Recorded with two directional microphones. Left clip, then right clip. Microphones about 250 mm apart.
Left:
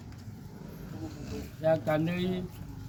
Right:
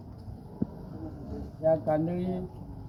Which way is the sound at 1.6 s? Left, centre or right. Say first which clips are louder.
Right 2 dB; left.